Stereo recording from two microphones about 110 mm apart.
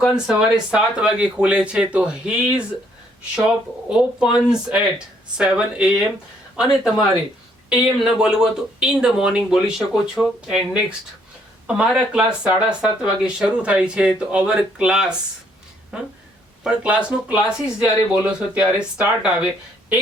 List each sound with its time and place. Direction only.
0.0 s speech: 5° right (ahead or behind)
3.3 s speech: 5° right (ahead or behind)